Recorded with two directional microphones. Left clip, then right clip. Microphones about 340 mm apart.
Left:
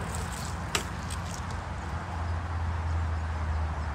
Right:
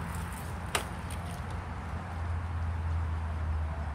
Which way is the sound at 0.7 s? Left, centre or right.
Centre.